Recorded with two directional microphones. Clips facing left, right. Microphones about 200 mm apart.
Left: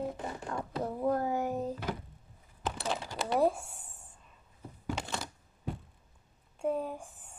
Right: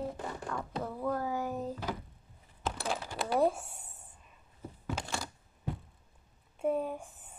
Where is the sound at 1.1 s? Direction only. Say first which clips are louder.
Left 3 dB; 45° left (ahead or behind).